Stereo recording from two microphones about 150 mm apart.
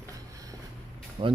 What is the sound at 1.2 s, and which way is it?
Speech, 40° right (ahead or behind).